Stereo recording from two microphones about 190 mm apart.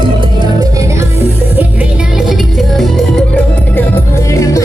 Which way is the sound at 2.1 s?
Centre (ahead or behind).